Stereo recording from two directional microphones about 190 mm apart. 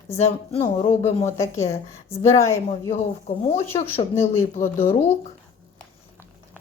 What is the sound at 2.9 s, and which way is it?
Speech, 40° left (ahead or behind).